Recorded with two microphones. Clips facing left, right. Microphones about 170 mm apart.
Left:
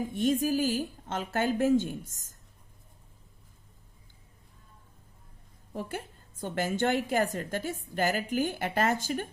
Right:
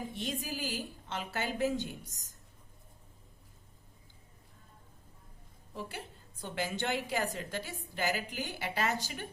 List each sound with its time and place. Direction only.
0.1 s a woman's voice: 50° left (ahead or behind)
5.7 s a woman's voice: 45° left (ahead or behind)